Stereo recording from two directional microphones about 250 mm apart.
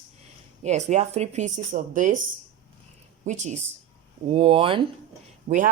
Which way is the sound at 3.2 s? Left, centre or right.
Right.